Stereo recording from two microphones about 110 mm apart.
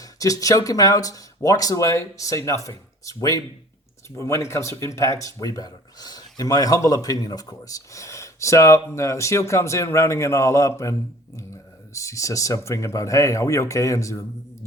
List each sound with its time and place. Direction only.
0.0 s speech: 30° left (ahead or behind)